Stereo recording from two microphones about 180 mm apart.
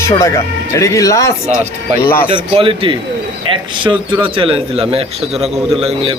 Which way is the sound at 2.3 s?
30° right (ahead or behind).